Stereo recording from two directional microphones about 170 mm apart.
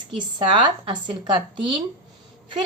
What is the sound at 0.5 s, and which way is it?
Speech, 30° right (ahead or behind).